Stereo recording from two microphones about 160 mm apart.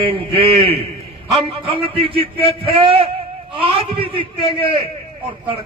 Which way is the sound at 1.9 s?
35° right (ahead or behind).